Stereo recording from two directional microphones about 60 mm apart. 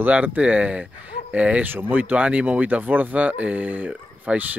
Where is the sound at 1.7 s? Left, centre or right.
Right.